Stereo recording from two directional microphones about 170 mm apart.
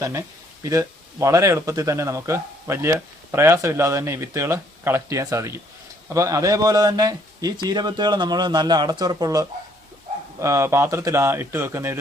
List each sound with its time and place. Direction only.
0.0 s a man's voice: 20° right (ahead or behind)